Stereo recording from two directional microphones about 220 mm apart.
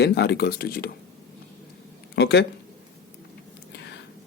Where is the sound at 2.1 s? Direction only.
50° left (ahead or behind).